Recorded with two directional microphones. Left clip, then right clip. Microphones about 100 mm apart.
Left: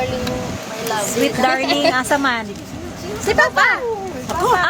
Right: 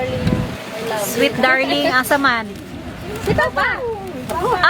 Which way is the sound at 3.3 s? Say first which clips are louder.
Left 3 dB; 55° left (ahead or behind).